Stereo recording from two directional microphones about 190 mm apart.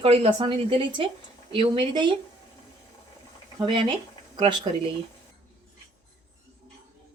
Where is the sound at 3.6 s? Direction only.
25° right (ahead or behind).